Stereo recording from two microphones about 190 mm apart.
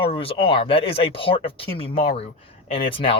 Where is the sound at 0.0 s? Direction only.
30° left (ahead or behind).